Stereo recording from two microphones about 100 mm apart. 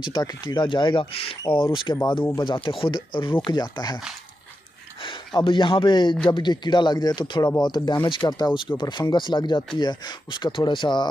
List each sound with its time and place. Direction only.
0.0 s speech: 40° left (ahead or behind)
3.4 s speech: 45° left (ahead or behind)
5.0 s speech: 55° left (ahead or behind)